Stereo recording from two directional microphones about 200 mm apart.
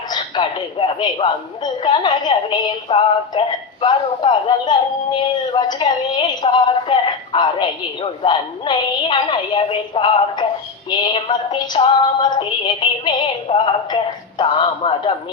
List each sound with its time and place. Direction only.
0.1 s a man's voice: 25° left (ahead or behind)